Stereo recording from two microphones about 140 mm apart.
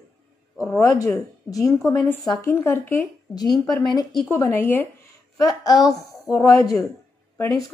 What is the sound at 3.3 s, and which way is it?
A woman's voice, 30° left (ahead or behind).